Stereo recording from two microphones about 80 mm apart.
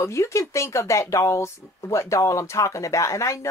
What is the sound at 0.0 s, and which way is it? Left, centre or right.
A woman's voice, left.